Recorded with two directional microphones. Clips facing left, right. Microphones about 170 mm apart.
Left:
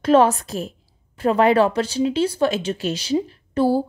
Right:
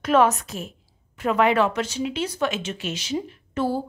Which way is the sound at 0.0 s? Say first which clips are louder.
Left 4 dB; 30° left (ahead or behind).